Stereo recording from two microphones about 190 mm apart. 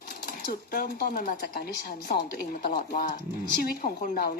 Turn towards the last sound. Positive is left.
turn(degrees=50)  # may be behind; listen again after turning